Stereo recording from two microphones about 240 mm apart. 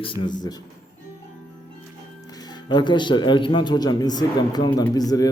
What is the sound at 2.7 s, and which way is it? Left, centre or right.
A man's voice, centre.